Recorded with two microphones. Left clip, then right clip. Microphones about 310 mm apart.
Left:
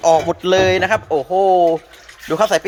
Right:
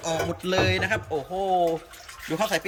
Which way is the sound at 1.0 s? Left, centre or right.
Left.